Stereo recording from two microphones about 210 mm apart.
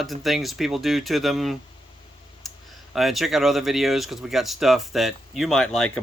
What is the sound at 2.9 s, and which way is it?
Speech, centre (ahead or behind).